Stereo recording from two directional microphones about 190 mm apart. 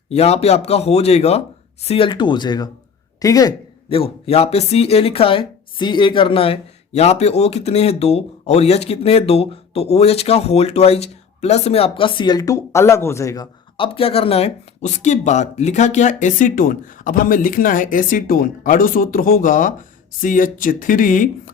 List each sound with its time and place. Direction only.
0.1 s speech: 35° left (ahead or behind)